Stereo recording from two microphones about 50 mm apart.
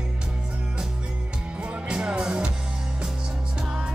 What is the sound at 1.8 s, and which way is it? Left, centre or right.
Music, centre.